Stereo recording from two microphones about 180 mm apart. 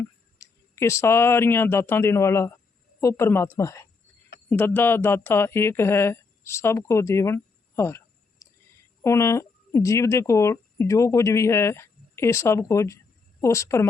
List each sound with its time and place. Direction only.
0.0 s speech: 15° left (ahead or behind)